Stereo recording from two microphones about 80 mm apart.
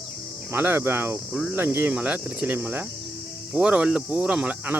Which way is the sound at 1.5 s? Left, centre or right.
Right.